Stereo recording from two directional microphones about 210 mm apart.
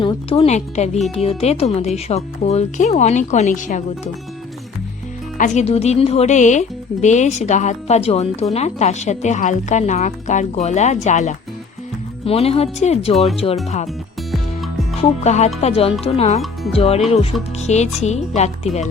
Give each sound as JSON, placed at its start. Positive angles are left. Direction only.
{"t": 0.0, "sound": "speech", "side_deg": 25}
{"t": 5.4, "sound": "speech", "side_deg": 30}
{"t": 14.3, "sound": "music", "side_deg": 0}
{"t": 15.2, "sound": "speech", "side_deg": 30}